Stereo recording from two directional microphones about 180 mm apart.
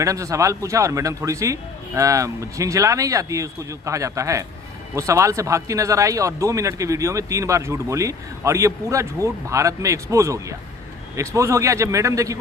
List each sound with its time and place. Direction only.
0.0 s speech: 15° right (ahead or behind)